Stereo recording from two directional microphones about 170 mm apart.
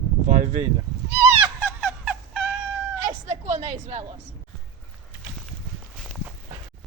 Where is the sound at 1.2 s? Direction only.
15° right (ahead or behind).